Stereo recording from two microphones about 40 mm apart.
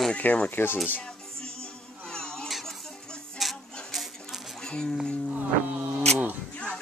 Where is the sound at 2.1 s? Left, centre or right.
Left.